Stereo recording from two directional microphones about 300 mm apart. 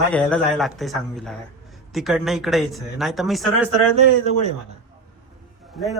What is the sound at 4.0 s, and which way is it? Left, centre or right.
Speech, right.